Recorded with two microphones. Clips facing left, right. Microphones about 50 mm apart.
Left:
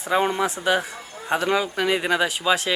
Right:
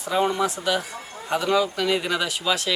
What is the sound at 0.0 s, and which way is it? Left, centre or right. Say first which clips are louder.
Speech: left 1 dB; left.